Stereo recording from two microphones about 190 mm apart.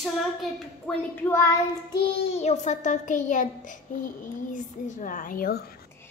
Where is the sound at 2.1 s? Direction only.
35° left (ahead or behind).